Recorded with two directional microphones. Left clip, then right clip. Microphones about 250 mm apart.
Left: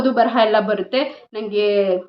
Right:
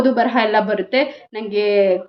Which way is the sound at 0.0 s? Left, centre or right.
Centre.